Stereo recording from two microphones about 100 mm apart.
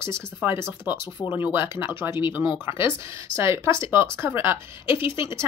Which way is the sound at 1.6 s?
50° left (ahead or behind).